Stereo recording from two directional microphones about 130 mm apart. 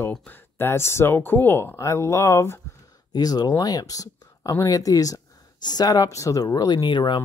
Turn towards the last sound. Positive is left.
turn(degrees=35)  # may be behind; listen again after turning